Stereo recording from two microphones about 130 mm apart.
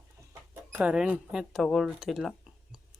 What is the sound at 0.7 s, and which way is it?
Speech, 10° right (ahead or behind).